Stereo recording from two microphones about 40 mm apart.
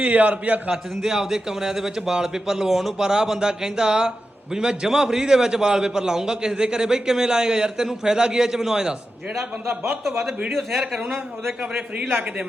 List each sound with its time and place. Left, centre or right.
0.0 s a man's voice: right
1.0 s a man's voice: centre
10.0 s a man's voice: centre